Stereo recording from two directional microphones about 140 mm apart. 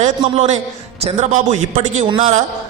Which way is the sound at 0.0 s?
55° right (ahead or behind).